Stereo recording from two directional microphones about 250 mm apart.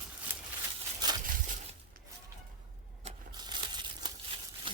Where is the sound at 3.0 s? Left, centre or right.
Right.